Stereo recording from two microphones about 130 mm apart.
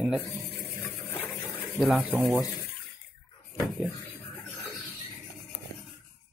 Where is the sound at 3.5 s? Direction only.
Centre (ahead or behind).